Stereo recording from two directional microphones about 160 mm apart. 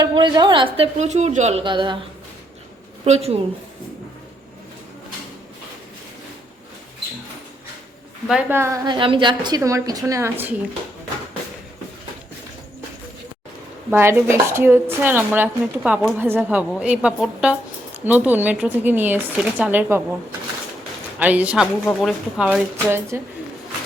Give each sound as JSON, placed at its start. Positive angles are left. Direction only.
{"t": 0.0, "sound": "a woman's voice", "side_deg": -25}
{"t": 0.9, "sound": "a woman's voice", "side_deg": -45}
{"t": 1.6, "sound": "a woman's voice", "side_deg": -30}
{"t": 3.0, "sound": "a woman's voice", "side_deg": -40}
{"t": 8.3, "sound": "a woman's voice", "side_deg": -10}
{"t": 13.9, "sound": "speech", "side_deg": -15}
{"t": 21.2, "sound": "speech", "side_deg": -10}